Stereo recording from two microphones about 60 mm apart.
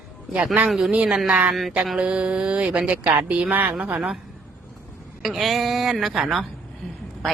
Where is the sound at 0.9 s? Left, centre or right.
Centre.